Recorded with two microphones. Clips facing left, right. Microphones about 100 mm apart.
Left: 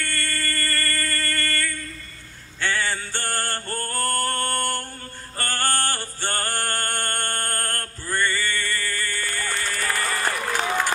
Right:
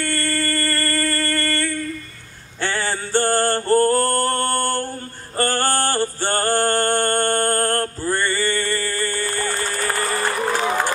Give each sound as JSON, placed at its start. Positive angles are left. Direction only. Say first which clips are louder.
{"t": 0.0, "sound": "music", "louder": "right 6 dB", "side_deg": -30}